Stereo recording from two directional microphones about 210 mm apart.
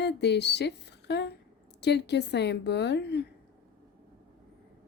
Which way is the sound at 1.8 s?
55° left (ahead or behind).